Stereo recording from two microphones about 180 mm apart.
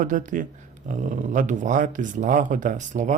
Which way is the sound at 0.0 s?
45° right (ahead or behind).